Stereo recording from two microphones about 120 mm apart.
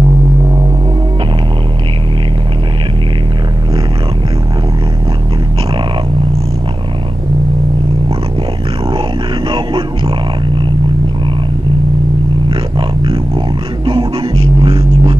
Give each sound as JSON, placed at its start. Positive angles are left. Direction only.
{"t": 9.5, "sound": "music", "side_deg": -45}
{"t": 12.4, "sound": "roar", "side_deg": -40}
{"t": 13.8, "sound": "music", "side_deg": -45}